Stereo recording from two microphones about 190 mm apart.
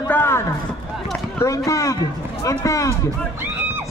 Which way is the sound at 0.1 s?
10° left (ahead or behind).